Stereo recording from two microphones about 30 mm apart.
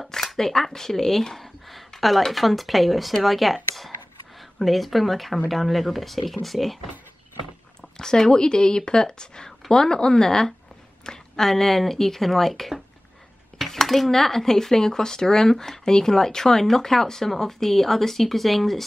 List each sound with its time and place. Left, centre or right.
0.1 s speech: centre
1.7 s a sound: centre
2.3 s speech: centre
8.3 s a woman's voice: left; by 18.9 s centre